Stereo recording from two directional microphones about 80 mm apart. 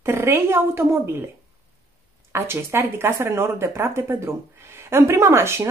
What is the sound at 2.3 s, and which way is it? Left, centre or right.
Speech, right.